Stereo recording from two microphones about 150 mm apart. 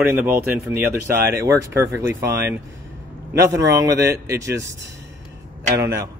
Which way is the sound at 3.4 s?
20° right (ahead or behind).